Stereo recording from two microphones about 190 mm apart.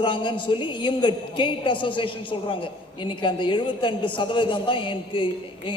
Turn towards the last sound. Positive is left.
turn(degrees=25)  # may be behind; listen again after turning